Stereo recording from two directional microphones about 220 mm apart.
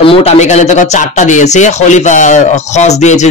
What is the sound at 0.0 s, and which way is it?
Speech, 25° left (ahead or behind).